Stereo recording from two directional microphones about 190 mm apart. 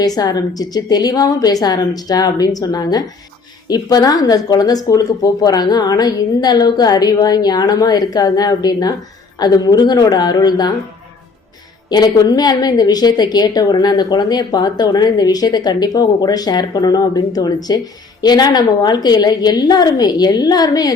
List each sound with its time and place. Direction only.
0.0 s a woman's voice: 20° left (ahead or behind)
11.9 s a woman's voice: 20° left (ahead or behind)